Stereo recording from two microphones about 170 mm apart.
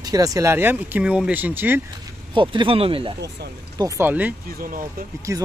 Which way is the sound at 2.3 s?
30° right (ahead or behind).